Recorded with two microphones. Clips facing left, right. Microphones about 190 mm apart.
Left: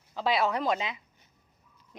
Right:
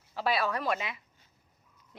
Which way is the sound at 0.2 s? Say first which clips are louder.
Left 3 dB; 20° left (ahead or behind).